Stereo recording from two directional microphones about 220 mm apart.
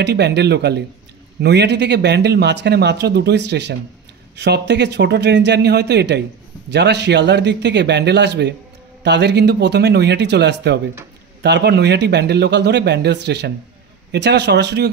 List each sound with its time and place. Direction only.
0.0 s speech: 50° right (ahead or behind)